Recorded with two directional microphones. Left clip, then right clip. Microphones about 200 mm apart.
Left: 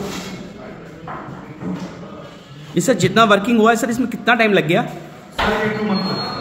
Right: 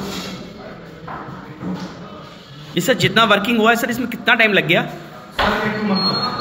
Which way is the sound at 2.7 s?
40° left (ahead or behind).